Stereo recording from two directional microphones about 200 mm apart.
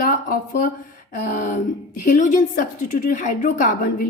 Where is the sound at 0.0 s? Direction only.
45° left (ahead or behind).